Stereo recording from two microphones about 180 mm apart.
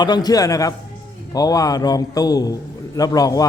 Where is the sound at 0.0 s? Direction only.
25° left (ahead or behind).